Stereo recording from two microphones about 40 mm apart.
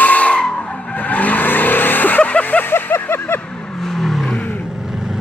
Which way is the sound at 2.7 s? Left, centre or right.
Left.